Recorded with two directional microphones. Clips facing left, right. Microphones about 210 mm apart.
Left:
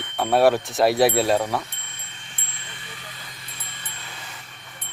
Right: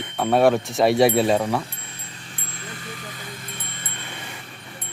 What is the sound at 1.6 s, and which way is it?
Chime, 30° right (ahead or behind).